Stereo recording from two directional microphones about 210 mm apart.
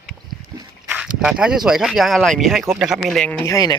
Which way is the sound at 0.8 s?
5° right (ahead or behind).